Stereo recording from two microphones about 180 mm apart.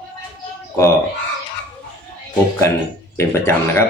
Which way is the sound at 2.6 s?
15° left (ahead or behind).